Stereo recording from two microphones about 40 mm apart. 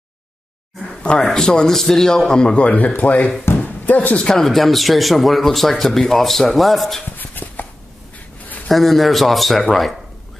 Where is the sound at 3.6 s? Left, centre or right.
Left.